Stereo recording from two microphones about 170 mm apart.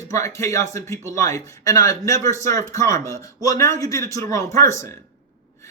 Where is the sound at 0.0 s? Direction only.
20° left (ahead or behind).